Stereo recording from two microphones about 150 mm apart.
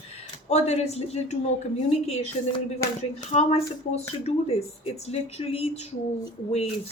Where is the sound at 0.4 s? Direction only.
45° left (ahead or behind).